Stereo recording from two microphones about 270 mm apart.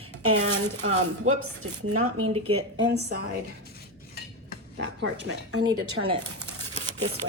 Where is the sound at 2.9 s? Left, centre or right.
Right.